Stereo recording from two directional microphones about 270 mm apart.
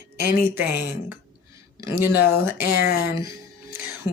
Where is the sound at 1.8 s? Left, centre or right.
Centre.